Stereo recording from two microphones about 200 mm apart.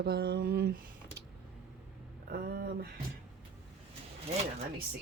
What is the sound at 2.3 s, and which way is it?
Speech, 55° right (ahead or behind).